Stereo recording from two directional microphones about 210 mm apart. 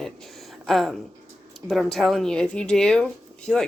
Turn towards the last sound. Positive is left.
turn(degrees=0)  # may be behind; listen again after turning